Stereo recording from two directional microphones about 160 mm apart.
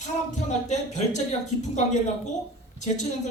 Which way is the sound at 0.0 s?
45° left (ahead or behind).